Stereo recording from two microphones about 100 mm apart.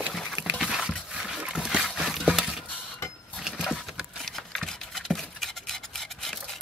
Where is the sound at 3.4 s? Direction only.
5° right (ahead or behind).